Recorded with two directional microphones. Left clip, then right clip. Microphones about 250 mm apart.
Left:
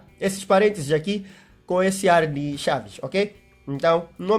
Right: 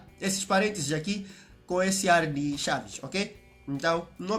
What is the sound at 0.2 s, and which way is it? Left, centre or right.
Speech, left.